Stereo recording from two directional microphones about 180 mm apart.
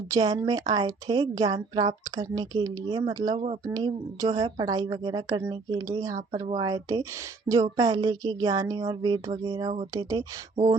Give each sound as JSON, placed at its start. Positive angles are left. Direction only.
{"t": 0.1, "sound": "a woman's voice", "side_deg": -20}